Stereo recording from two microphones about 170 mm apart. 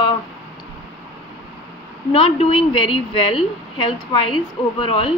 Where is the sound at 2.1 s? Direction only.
35° left (ahead or behind).